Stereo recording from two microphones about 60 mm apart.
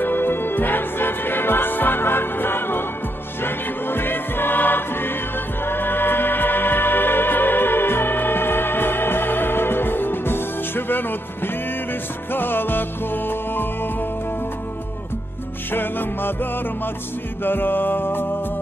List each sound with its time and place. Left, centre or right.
0.0 s music: left
15.7 s music: left
17.4 s music: left